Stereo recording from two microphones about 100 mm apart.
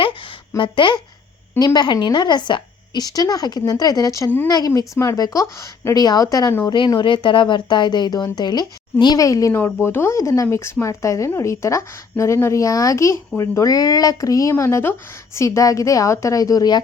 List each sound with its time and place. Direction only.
0.0 s a sound: 60° left (ahead or behind)
1.5 s speech: 40° left (ahead or behind)
6.7 s speech: 50° left (ahead or behind)